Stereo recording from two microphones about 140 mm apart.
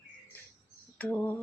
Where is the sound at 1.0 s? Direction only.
10° left (ahead or behind).